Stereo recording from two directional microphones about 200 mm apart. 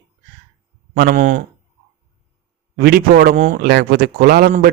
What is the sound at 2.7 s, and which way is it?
Speech, 50° right (ahead or behind).